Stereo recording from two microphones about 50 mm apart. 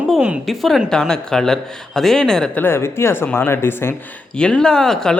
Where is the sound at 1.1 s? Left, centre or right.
Centre.